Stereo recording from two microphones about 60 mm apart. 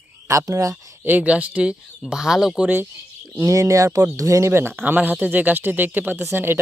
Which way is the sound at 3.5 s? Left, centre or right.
Right.